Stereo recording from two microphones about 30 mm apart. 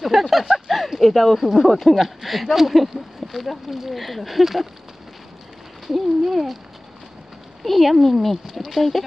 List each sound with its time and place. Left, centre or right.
0.0 s speech: centre
1.4 s speech: centre
5.9 s speech: centre
7.6 s speech: centre